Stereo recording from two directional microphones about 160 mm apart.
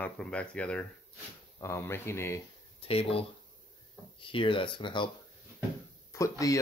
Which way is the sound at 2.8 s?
35° left (ahead or behind).